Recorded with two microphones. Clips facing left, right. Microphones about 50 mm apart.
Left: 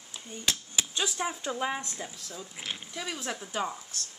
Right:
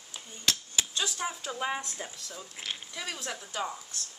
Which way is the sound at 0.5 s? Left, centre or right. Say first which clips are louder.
Right 1 dB; centre.